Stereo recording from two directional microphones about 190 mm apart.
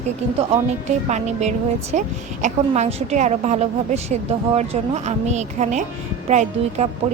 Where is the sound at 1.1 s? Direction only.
35° right (ahead or behind).